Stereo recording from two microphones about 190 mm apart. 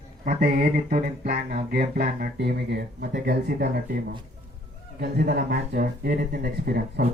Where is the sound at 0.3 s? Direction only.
45° right (ahead or behind).